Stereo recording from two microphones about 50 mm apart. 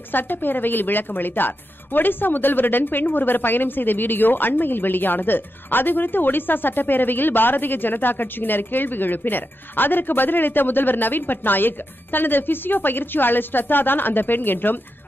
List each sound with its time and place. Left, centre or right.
0.1 s a woman's voice: left